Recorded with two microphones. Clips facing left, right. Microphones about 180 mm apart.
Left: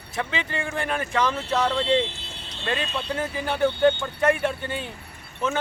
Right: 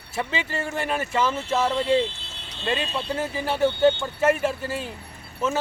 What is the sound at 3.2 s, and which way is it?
Speech, 5° right (ahead or behind).